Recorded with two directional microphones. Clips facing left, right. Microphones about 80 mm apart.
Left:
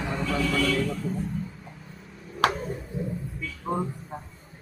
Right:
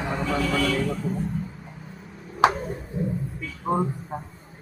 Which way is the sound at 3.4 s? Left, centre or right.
Centre.